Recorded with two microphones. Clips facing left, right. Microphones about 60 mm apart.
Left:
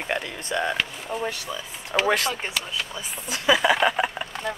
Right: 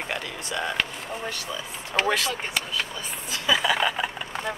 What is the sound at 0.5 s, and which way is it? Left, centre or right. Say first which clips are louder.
Speech: left 4 dB; centre.